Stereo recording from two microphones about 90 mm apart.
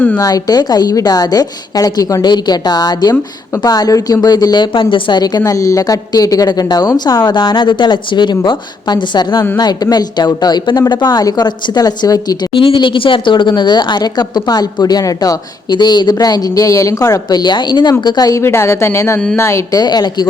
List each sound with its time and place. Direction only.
0.2 s speech: 40° left (ahead or behind); by 5.2 s 70° left (ahead or behind)
5.5 s a woman's voice: 40° left (ahead or behind)
12.5 s speech: 70° left (ahead or behind)
18.0 s speech: 50° left (ahead or behind)
18.4 s speech: 30° left (ahead or behind)
19.8 s speech: 50° left (ahead or behind)